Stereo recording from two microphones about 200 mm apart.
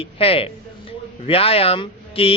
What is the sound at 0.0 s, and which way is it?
A man's voice, 30° left (ahead or behind).